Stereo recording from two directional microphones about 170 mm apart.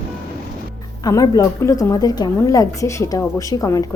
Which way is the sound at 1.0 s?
20° left (ahead or behind).